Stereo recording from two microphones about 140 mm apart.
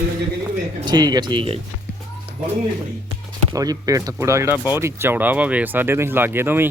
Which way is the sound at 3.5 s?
25° right (ahead or behind).